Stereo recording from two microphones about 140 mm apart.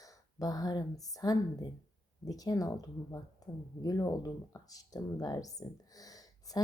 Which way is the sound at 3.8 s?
25° left (ahead or behind).